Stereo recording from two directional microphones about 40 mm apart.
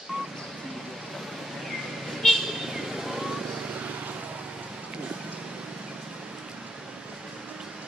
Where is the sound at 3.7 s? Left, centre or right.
Right.